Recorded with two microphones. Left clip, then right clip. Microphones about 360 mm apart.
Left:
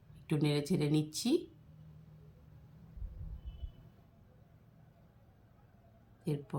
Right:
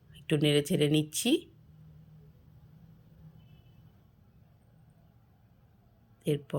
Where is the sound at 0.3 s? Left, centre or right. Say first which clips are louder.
Right 7 dB; centre.